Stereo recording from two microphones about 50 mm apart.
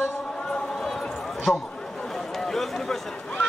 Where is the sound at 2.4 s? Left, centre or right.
Centre.